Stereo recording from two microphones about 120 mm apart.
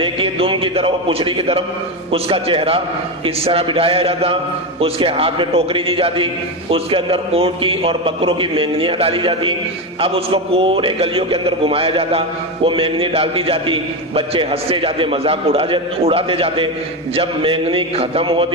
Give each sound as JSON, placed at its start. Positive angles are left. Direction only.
{"t": 0.0, "sound": "a man's voice", "side_deg": -50}